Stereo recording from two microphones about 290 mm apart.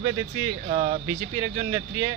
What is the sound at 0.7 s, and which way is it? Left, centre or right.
Speech, right.